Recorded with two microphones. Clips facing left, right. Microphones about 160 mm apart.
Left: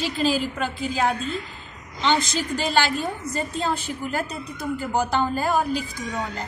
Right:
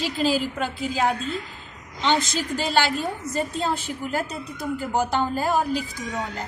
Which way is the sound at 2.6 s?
Centre (ahead or behind).